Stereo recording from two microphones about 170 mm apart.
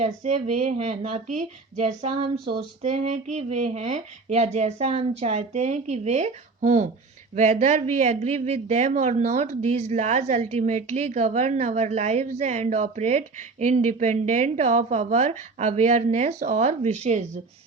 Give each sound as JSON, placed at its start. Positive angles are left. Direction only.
{"t": 0.0, "sound": "a woman's voice", "side_deg": -45}